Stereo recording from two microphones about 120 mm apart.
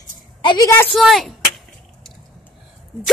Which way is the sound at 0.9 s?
Centre (ahead or behind).